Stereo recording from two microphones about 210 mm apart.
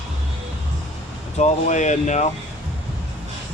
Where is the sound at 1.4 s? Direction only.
35° left (ahead or behind).